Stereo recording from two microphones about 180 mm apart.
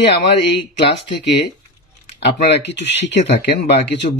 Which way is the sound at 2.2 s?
70° left (ahead or behind).